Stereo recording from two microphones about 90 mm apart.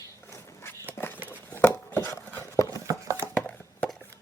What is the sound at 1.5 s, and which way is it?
Chopping, 20° left (ahead or behind).